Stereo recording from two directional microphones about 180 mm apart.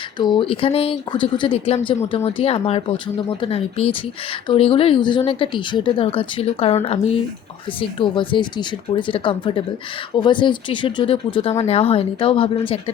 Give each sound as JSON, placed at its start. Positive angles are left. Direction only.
{"t": 0.2, "sound": "a woman's voice", "side_deg": 25}